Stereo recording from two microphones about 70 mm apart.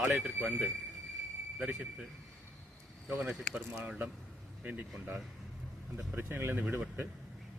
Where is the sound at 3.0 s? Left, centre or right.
Right.